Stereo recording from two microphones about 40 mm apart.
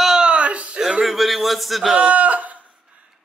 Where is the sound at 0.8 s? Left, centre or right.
Centre.